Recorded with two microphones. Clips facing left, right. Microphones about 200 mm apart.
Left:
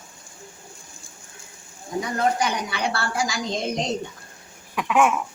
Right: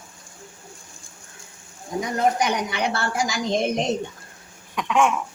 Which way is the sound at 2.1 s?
20° right (ahead or behind).